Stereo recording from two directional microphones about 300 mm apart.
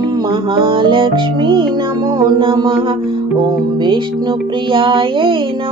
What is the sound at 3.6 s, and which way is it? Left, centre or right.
Speech, centre.